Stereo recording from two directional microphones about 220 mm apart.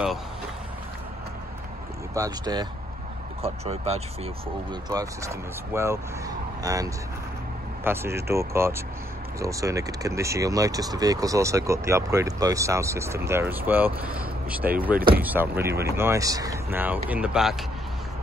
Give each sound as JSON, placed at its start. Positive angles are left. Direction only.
{"t": 2.1, "sound": "speech", "side_deg": -15}
{"t": 4.8, "sound": "speech", "side_deg": -15}